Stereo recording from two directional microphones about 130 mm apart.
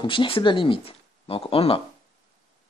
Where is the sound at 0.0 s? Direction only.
40° left (ahead or behind).